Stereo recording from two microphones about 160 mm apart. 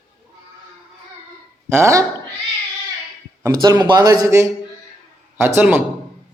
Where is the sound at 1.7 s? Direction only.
20° right (ahead or behind).